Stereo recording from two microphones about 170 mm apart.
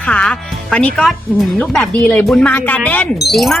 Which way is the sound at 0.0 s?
5° left (ahead or behind).